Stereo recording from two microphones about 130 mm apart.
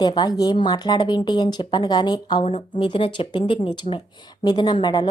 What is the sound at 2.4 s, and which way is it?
A woman's voice, 45° left (ahead or behind).